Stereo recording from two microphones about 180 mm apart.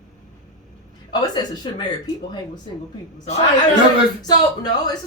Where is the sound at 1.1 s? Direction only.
20° left (ahead or behind).